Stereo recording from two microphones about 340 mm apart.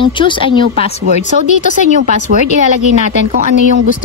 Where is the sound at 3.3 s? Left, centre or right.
Right.